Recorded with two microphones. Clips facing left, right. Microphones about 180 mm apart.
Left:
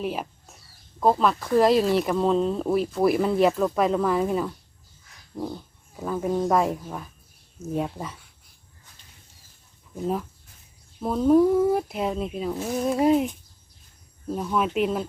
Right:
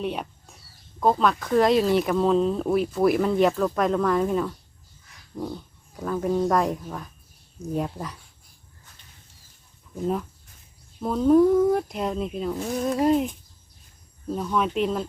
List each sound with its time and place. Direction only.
0.0 s speech: centre (ahead or behind)
6.0 s speech: 5° left (ahead or behind)
10.0 s speech: centre (ahead or behind)